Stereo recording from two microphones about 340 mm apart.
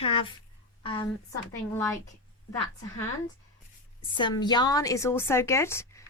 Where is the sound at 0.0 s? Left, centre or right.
Centre.